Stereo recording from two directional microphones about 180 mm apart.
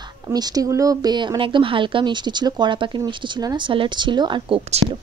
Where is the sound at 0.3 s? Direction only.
20° right (ahead or behind).